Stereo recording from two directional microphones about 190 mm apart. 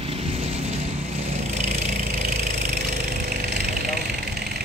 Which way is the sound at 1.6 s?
35° right (ahead or behind).